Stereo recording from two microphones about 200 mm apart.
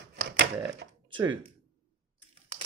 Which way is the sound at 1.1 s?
25° right (ahead or behind).